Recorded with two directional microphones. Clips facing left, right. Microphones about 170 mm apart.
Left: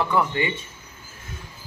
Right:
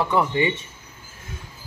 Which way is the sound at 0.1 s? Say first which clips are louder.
Right 2 dB; 20° right (ahead or behind).